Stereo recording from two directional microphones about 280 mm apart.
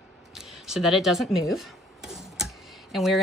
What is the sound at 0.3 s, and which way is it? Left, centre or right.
Speech, centre.